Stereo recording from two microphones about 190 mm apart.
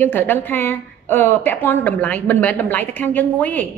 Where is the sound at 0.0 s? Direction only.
10° left (ahead or behind).